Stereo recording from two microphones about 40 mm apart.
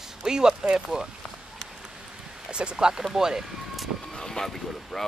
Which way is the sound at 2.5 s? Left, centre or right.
Right.